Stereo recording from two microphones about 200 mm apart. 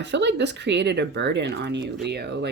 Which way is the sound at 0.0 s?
60° right (ahead or behind).